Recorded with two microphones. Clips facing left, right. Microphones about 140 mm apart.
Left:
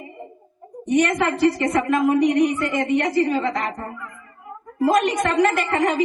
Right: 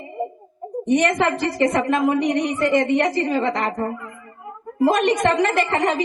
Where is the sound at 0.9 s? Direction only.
25° right (ahead or behind).